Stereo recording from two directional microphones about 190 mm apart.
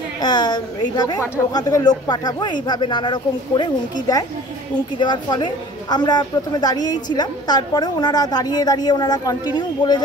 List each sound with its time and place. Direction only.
0.2 s a woman's voice: 20° left (ahead or behind)